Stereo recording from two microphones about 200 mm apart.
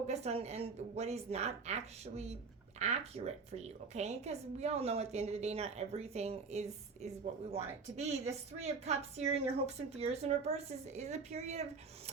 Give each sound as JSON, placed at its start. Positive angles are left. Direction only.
{"t": 0.1, "sound": "a woman's voice", "side_deg": -30}